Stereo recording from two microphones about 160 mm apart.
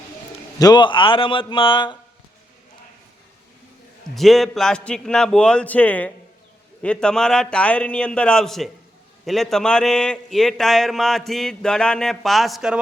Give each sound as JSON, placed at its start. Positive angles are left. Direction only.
{"t": 0.6, "sound": "a man's voice", "side_deg": 25}
{"t": 4.1, "sound": "a man's voice", "side_deg": 0}